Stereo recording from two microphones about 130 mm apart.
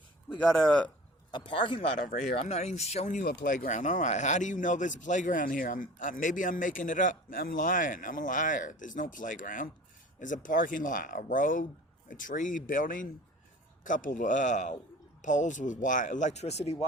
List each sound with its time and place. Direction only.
0.5 s a man's voice: 5° left (ahead or behind)
1.3 s speech: 40° left (ahead or behind)
2.4 s speech: 55° left (ahead or behind)